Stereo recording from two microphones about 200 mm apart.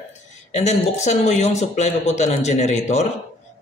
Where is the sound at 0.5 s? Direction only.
35° left (ahead or behind).